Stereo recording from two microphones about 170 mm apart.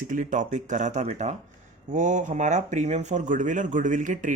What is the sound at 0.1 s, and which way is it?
Speech, 50° right (ahead or behind).